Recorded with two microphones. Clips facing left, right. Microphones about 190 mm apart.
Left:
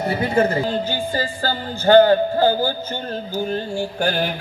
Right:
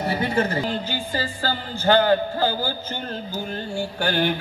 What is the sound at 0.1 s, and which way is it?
A woman's voice, 45° left (ahead or behind).